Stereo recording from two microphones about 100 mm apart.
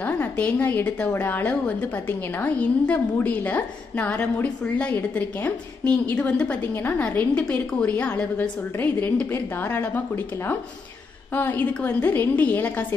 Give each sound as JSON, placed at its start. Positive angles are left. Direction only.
{"t": 0.0, "sound": "a woman's voice", "side_deg": 15}